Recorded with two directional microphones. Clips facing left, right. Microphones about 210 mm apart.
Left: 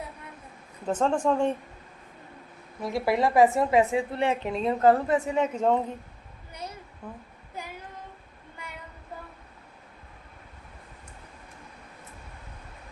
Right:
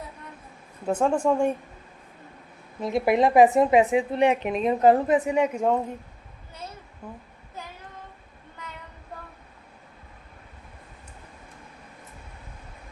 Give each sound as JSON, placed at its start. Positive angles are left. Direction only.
{"t": 0.9, "sound": "a woman's voice", "side_deg": -10}
{"t": 2.8, "sound": "a woman's voice", "side_deg": -20}
{"t": 6.5, "sound": "a sound", "side_deg": 15}
{"t": 7.0, "sound": "a woman's voice", "side_deg": -10}
{"t": 7.6, "sound": "child singing", "side_deg": 10}